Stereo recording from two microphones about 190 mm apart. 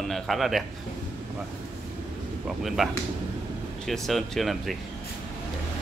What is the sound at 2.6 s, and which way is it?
Speech, centre (ahead or behind).